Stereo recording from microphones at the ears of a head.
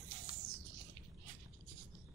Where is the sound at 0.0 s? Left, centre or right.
Right.